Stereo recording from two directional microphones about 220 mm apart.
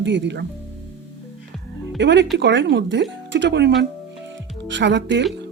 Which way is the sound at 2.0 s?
55° right (ahead or behind).